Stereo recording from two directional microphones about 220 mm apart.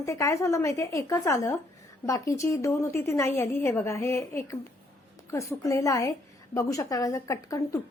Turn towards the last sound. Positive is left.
turn(degrees=15)  # may be behind; listen again after turning